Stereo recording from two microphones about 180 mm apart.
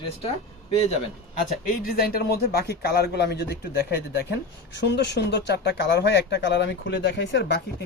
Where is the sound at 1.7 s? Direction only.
55° left (ahead or behind).